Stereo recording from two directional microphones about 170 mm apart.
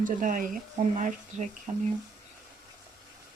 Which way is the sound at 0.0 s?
50° right (ahead or behind).